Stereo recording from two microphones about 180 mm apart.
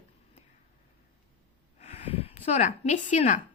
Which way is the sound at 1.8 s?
35° left (ahead or behind).